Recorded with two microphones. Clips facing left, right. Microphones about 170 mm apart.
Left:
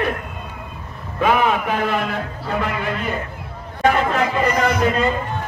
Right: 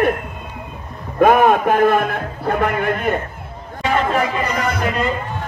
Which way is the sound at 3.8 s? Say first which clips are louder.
Left 2 dB; 50° left (ahead or behind).